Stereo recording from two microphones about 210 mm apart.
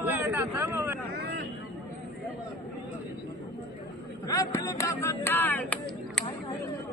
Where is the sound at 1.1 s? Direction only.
50° right (ahead or behind).